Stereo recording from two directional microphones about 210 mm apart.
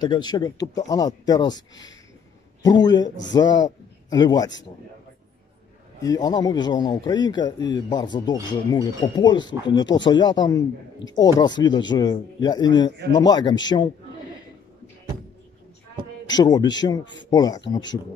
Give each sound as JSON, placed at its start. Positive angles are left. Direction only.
{"t": 0.0, "sound": "speech", "side_deg": 20}
{"t": 6.0, "sound": "speech", "side_deg": 20}
{"t": 16.3, "sound": "speech", "side_deg": 20}